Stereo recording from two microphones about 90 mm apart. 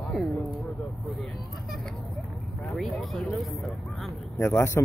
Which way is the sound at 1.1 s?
Centre (ahead or behind).